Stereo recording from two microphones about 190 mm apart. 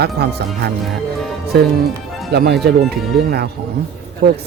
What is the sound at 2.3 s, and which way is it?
Speech, 60° right (ahead or behind).